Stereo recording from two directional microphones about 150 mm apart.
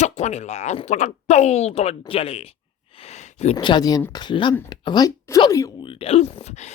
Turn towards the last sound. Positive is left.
turn(degrees=45)  # may be behind; listen again after turning